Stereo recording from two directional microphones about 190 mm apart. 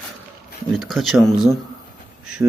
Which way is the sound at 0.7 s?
Centre (ahead or behind).